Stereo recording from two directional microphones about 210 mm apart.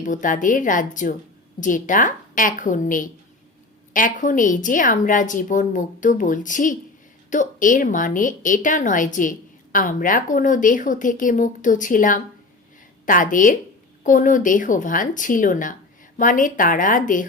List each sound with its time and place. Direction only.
0.0 s a woman's voice: 40° left (ahead or behind)